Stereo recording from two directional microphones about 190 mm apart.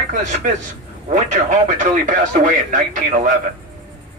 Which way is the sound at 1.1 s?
40° right (ahead or behind).